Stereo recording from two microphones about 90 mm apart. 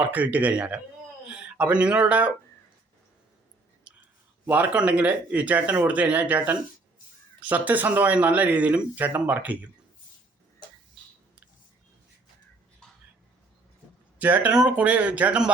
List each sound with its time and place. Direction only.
0.0 s speech: 20° right (ahead or behind)
1.4 s a sound: 15° right (ahead or behind)
3.9 s clicking: 15° right (ahead or behind)
4.4 s speech: 15° right (ahead or behind)
14.2 s speech: 20° right (ahead or behind)